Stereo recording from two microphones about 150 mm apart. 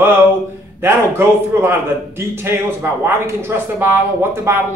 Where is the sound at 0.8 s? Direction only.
15° right (ahead or behind).